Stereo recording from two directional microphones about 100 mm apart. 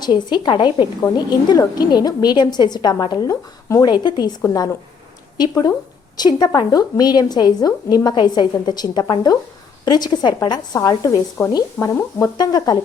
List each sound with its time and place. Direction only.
0.0 s a woman's voice: 45° left (ahead or behind)
10.8 s speech: 35° left (ahead or behind)